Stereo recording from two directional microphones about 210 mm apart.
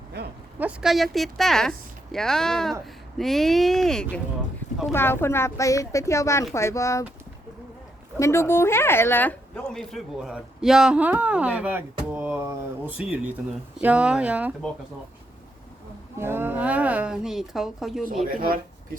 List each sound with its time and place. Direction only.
0.6 s a woman's voice: centre (ahead or behind); by 7.0 s 15° left (ahead or behind)
8.2 s a woman's voice: 15° left (ahead or behind); by 14.5 s 5° right (ahead or behind)
16.1 s speech: 10° right (ahead or behind)
18.3 s speech: 45° right (ahead or behind)